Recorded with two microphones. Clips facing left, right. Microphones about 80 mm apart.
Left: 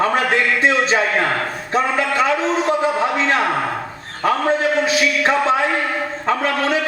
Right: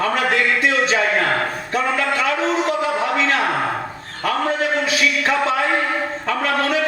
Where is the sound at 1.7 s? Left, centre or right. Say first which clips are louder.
Left 3 dB; left.